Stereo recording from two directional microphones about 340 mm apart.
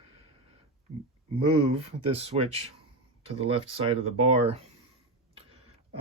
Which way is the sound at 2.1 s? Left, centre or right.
Centre.